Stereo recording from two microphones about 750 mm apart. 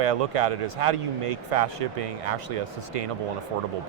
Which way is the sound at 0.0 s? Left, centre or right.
Right.